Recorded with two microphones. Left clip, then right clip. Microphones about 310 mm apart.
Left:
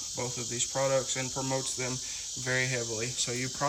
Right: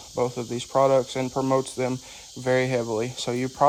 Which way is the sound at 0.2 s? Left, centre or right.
Centre.